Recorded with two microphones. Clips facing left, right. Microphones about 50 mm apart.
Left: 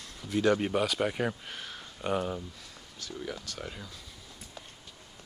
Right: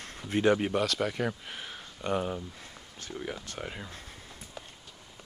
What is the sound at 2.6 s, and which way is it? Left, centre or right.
Speech, right.